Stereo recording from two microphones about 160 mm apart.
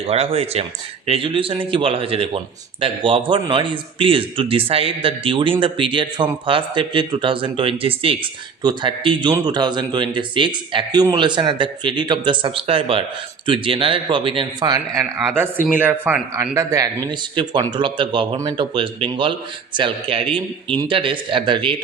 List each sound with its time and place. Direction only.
0.0 s speech: 40° right (ahead or behind)
15.7 s a man's voice: 10° right (ahead or behind); by 21.8 s 30° right (ahead or behind)